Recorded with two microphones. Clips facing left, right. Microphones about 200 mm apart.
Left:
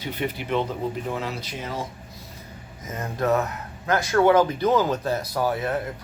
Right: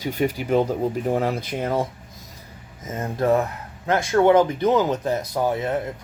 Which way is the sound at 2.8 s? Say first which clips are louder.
Right 3 dB; 25° right (ahead or behind).